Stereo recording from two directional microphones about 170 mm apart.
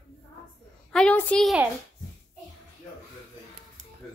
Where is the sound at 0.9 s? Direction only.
5° left (ahead or behind).